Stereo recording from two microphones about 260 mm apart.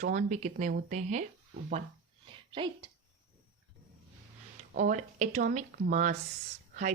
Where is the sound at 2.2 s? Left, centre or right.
Centre.